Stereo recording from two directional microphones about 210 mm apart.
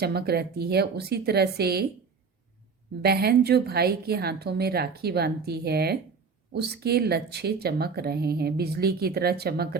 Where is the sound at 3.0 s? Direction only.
50° right (ahead or behind).